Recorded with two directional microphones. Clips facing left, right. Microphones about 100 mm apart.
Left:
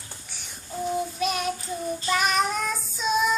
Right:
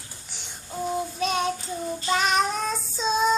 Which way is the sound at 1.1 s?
30° right (ahead or behind).